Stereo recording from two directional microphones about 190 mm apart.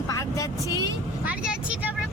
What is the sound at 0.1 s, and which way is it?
Vehicle, 15° left (ahead or behind).